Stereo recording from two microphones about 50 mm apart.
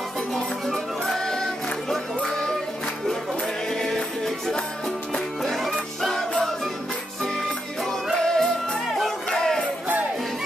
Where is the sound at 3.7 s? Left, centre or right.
Centre.